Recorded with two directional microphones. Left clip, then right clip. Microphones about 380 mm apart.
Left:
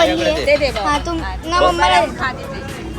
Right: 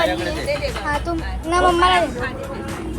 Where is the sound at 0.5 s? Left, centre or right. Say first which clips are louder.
Left 10 dB; left.